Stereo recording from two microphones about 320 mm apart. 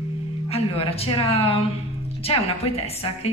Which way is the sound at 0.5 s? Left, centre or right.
Centre.